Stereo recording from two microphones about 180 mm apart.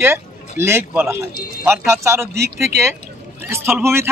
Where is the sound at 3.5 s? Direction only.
15° right (ahead or behind).